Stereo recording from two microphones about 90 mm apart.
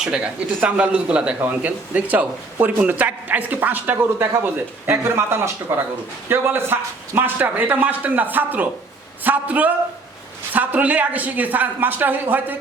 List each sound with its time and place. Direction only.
0.0 s a man's voice: 10° right (ahead or behind)